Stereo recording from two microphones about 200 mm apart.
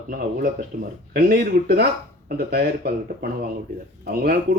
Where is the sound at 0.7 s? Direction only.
45° right (ahead or behind).